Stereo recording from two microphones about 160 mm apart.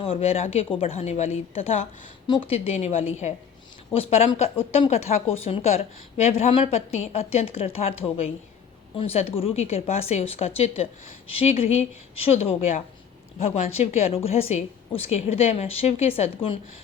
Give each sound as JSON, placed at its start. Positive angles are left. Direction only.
{"t": 0.0, "sound": "speech", "side_deg": 35}